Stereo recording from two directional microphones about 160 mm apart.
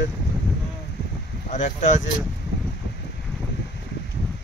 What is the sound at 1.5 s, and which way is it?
Speech, 50° left (ahead or behind).